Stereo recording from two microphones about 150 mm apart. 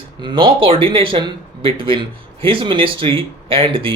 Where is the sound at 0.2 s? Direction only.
30° right (ahead or behind).